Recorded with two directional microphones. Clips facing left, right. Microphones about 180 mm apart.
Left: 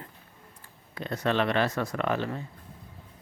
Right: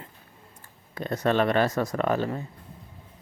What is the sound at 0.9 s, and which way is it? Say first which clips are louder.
Speech: right 3 dB; 45° right (ahead or behind).